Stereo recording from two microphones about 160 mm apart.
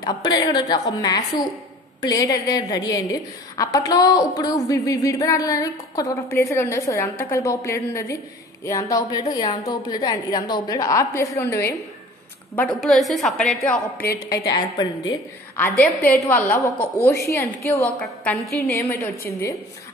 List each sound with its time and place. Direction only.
0.0 s a woman's voice: 25° left (ahead or behind)
12.5 s a woman's voice: centre (ahead or behind)
13.9 s a woman's voice: 80° left
14.5 s a woman's voice: 25° left (ahead or behind)
15.5 s a woman's voice: 10° left (ahead or behind)
17.9 s a woman's voice: 10° left (ahead or behind)